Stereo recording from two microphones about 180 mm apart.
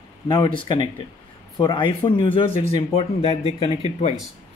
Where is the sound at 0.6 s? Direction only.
25° left (ahead or behind).